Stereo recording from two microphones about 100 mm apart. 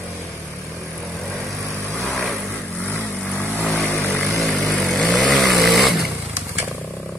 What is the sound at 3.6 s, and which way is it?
Vehicle, 5° left (ahead or behind).